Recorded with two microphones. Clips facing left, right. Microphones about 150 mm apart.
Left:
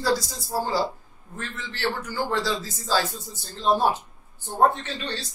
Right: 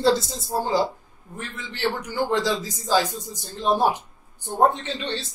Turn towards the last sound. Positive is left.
turn(degrees=-20)  # may be behind; listen again after turning